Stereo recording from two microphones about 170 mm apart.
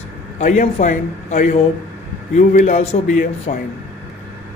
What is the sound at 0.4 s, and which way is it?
Speech, 45° left (ahead or behind).